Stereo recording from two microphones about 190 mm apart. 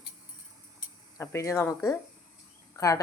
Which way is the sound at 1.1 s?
15° left (ahead or behind).